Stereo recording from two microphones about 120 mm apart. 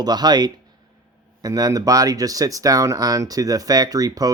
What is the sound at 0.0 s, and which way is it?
Speech, 35° right (ahead or behind).